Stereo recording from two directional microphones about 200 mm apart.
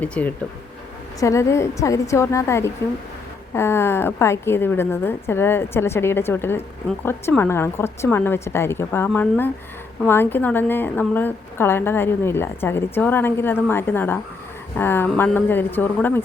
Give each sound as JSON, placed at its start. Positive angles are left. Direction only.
{"t": 0.0, "sound": "a woman's voice", "side_deg": 5}